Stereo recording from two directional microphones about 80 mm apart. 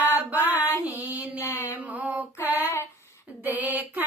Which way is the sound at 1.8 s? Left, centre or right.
Centre.